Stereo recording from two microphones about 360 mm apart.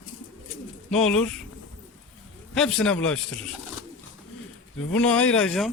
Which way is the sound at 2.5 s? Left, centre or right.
Centre.